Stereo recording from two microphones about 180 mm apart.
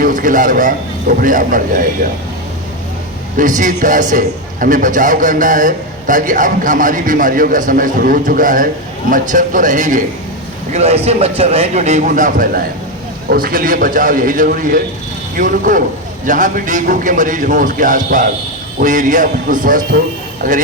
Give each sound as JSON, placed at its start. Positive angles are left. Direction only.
{"t": 0.0, "sound": "a man's voice", "side_deg": -50}
{"t": 3.3, "sound": "a man's voice", "side_deg": -45}